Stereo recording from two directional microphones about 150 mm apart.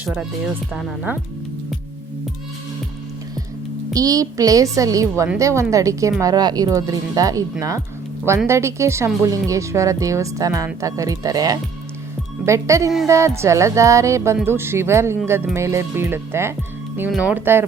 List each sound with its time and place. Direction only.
0.0 s speech: 5° right (ahead or behind)
3.9 s speech: 25° right (ahead or behind)
8.4 s speech: 20° right (ahead or behind)